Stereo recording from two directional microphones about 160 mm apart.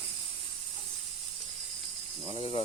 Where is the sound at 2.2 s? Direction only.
35° left (ahead or behind).